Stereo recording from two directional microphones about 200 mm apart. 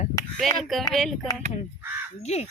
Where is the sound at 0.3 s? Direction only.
Centre (ahead or behind).